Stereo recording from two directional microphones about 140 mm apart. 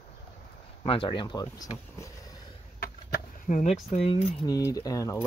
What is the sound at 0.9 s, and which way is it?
Speech, 40° left (ahead or behind).